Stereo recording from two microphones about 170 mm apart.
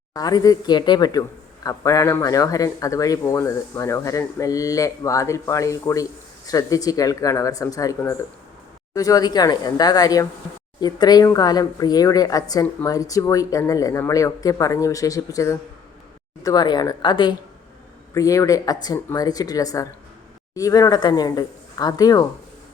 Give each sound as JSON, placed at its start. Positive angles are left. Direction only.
{"t": 0.1, "sound": "speech", "side_deg": 20}